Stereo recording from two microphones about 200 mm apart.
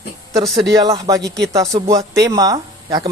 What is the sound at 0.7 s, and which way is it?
Speech, 20° right (ahead or behind).